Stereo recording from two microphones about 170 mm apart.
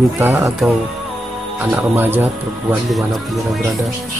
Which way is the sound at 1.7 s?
10° right (ahead or behind).